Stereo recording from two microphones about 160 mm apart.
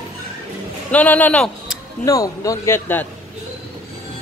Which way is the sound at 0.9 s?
10° left (ahead or behind).